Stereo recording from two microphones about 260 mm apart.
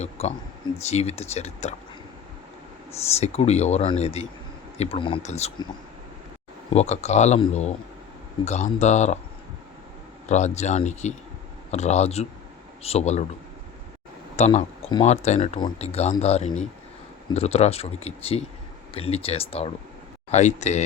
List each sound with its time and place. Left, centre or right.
0.0 s speech: left
3.2 s speech: left
6.7 s speech: left
10.2 s speech: left
14.3 s speech: left